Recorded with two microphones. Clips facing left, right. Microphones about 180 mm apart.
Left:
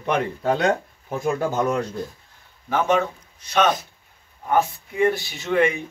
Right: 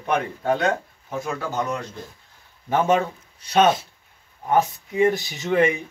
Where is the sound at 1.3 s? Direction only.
50° left (ahead or behind).